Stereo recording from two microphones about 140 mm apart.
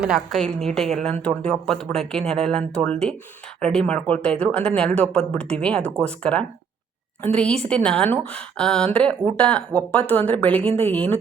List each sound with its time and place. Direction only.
0.0 s speech: 5° right (ahead or behind)